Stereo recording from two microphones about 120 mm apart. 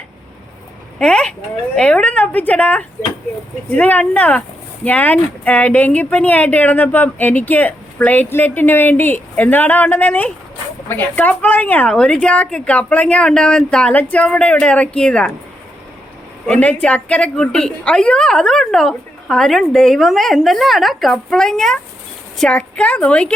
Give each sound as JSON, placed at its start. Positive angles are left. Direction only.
{"t": 0.9, "sound": "a sound", "side_deg": 5}
{"t": 1.7, "sound": "speech", "side_deg": 10}
{"t": 16.5, "sound": "a woman's voice", "side_deg": 10}